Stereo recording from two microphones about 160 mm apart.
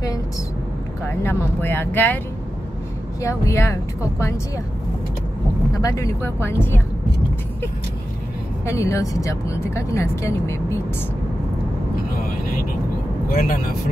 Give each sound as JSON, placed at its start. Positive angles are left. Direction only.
{"t": 1.2, "sound": "speech", "side_deg": 15}
{"t": 3.2, "sound": "speech", "side_deg": 20}
{"t": 5.8, "sound": "speech", "side_deg": 20}
{"t": 8.6, "sound": "speech", "side_deg": 20}
{"t": 13.3, "sound": "speech", "side_deg": 65}